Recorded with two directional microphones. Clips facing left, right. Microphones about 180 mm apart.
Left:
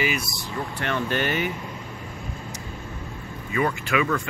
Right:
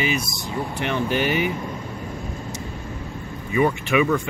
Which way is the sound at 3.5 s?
15° right (ahead or behind).